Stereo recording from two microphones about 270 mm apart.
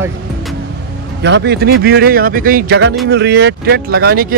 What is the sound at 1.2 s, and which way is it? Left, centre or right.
Speech, right.